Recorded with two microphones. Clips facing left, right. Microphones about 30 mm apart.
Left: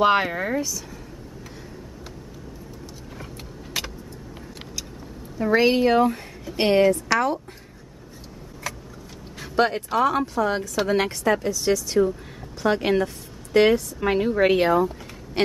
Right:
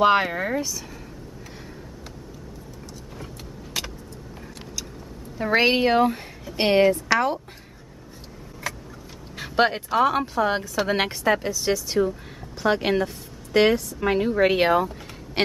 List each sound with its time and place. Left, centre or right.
0.0 s speech: centre
3.8 s vehicle: centre
5.4 s a woman's voice: right
8.6 s vehicle: centre
9.4 s a sound: centre
9.9 s a woman's voice: centre
14.6 s a woman's voice: right